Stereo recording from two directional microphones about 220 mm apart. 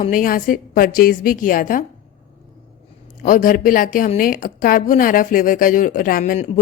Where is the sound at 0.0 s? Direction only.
40° left (ahead or behind).